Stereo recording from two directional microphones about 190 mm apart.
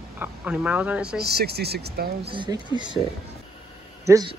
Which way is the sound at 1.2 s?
60° right (ahead or behind).